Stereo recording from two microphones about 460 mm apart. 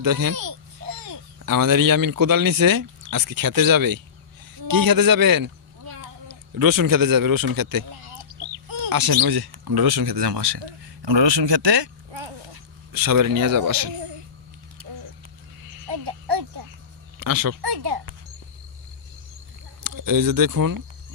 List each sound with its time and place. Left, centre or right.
0.0 s speech: right
12.9 s speech: right
14.8 s a sound: right
17.2 s a child's voice: right
19.8 s speech: right